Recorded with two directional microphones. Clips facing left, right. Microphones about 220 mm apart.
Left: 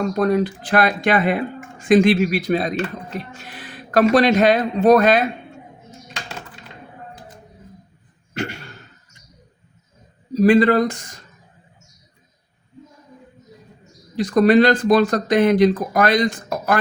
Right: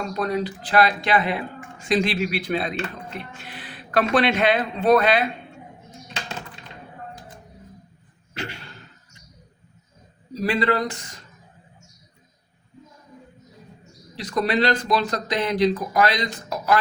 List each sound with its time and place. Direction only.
0.1 s speech: 50° left (ahead or behind)
8.3 s a sound: 50° left (ahead or behind)
10.4 s speech: 50° left (ahead or behind)
14.2 s speech: 45° left (ahead or behind)